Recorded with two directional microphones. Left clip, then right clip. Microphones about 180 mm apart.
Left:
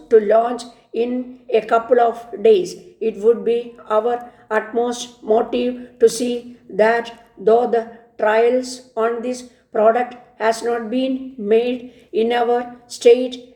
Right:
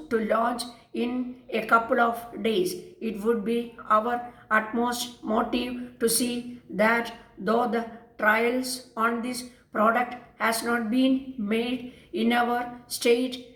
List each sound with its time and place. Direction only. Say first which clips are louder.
0.1 s a woman's voice: left 11 dB; 50° left (ahead or behind)